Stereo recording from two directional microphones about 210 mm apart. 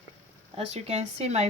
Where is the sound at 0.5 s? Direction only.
30° right (ahead or behind).